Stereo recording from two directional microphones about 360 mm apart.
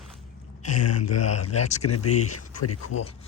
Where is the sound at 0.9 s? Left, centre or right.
Left.